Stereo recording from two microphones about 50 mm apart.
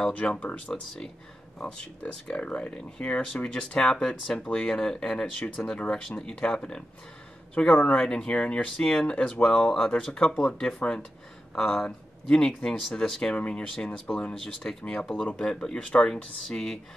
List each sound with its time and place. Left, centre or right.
0.1 s speech: left
11.5 s speech: centre
13.3 s speech: left